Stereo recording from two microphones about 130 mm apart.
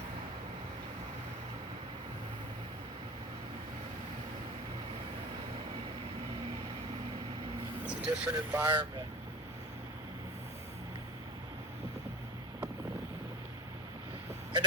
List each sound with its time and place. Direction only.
7.9 s speech: 10° right (ahead or behind)
8.6 s speech: 35° right (ahead or behind)